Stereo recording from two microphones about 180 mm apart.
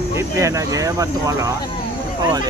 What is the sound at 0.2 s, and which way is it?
Speech, 15° right (ahead or behind).